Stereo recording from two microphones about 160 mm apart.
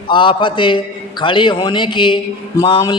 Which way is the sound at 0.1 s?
30° left (ahead or behind).